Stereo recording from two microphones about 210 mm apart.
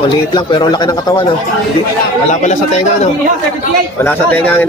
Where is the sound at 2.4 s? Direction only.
35° left (ahead or behind).